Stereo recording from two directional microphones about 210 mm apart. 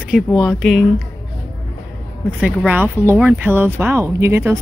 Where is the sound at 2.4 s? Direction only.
5° right (ahead or behind).